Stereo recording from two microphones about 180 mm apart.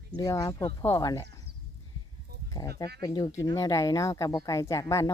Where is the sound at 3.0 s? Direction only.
20° left (ahead or behind).